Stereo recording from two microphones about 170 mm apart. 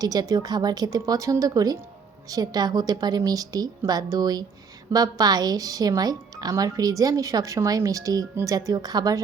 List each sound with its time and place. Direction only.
0.0 s speech: 20° right (ahead or behind)